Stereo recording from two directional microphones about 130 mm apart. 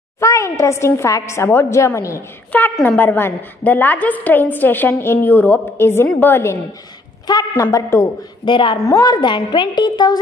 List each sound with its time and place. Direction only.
0.2 s a woman's voice: 25° left (ahead or behind)
7.2 s a woman's voice: 30° left (ahead or behind)
8.5 s a woman's voice: 40° left (ahead or behind)
8.8 s a woman's voice: 25° left (ahead or behind)